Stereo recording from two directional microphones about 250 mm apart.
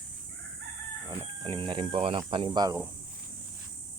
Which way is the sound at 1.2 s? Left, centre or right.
Centre.